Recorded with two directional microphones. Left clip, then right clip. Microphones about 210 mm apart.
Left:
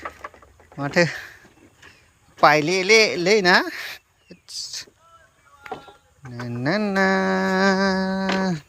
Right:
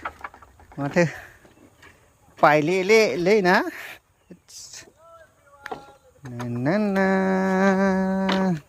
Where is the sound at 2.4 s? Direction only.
15° right (ahead or behind).